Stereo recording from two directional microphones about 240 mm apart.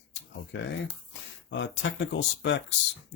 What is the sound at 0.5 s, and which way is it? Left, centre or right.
Speech, left.